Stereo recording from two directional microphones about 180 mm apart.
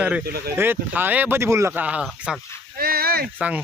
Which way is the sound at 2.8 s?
55° right (ahead or behind).